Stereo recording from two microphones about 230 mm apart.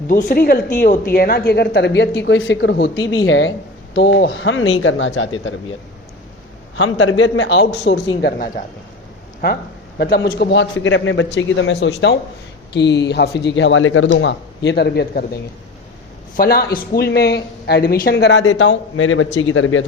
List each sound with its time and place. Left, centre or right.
0.1 s a woman's voice: left
6.7 s speech: left
10.0 s speech: left
16.4 s speech: left